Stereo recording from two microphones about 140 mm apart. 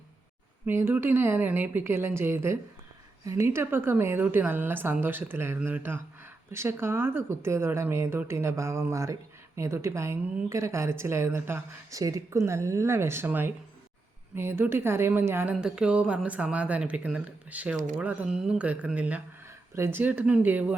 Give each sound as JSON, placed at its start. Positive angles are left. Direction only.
{"t": 0.6, "sound": "a woman's voice", "side_deg": -15}
{"t": 15.5, "sound": "a woman's voice", "side_deg": -5}